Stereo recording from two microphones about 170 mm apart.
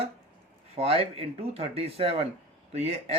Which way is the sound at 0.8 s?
35° right (ahead or behind).